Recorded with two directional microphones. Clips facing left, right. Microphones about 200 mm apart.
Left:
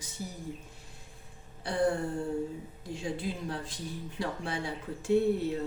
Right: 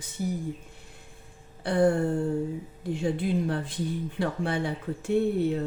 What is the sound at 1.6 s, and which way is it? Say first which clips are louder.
A woman's voice: right 6 dB; 55° right (ahead or behind).